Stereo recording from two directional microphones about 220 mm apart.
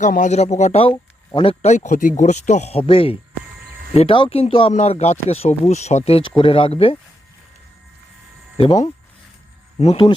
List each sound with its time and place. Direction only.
0.0 s speech: 35° left (ahead or behind)
8.5 s speech: 30° left (ahead or behind)